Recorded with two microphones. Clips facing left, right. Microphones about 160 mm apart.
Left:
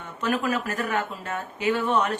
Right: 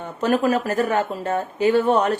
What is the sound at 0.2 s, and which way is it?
A woman's voice, 35° right (ahead or behind).